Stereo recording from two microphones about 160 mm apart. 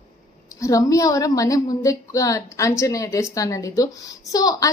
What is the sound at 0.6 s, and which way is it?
A woman's voice, 20° left (ahead or behind).